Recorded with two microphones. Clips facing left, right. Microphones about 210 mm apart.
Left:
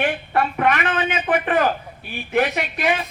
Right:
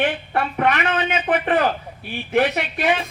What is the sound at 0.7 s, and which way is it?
Speech, 50° left (ahead or behind).